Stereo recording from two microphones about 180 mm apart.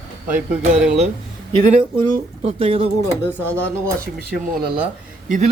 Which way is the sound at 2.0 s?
35° right (ahead or behind).